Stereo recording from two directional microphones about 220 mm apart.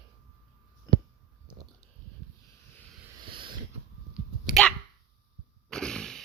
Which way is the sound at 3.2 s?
20° right (ahead or behind).